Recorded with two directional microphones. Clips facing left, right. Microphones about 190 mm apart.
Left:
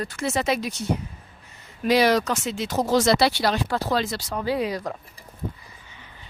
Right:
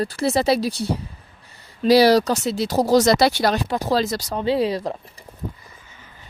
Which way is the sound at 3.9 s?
40° right (ahead or behind).